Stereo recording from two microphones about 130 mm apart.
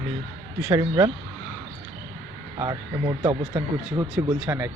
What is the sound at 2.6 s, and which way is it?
Speech, 30° right (ahead or behind).